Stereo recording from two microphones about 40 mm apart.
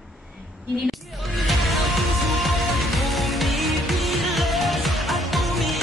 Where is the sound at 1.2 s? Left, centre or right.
Centre.